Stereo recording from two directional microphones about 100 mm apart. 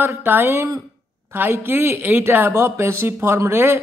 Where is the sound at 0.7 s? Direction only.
35° right (ahead or behind).